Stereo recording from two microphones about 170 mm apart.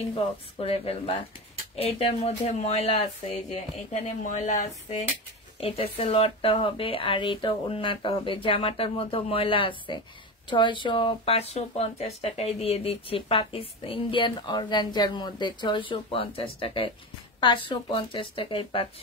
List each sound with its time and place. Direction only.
0.1 s speech: 35° left (ahead or behind)